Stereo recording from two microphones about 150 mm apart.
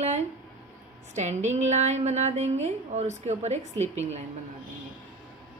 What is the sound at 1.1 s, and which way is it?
A woman's voice, 50° right (ahead or behind).